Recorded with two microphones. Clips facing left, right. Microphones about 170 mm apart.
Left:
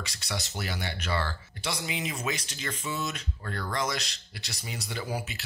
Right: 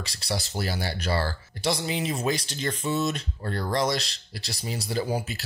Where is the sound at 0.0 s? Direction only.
35° right (ahead or behind).